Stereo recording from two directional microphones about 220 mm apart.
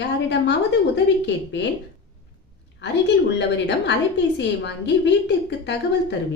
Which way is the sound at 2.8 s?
55° left (ahead or behind).